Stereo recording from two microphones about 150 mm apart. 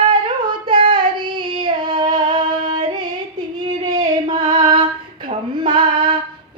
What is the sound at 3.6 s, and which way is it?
Female singing, 25° right (ahead or behind).